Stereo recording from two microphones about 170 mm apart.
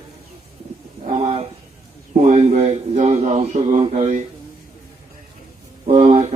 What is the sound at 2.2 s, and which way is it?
Speech, 40° right (ahead or behind).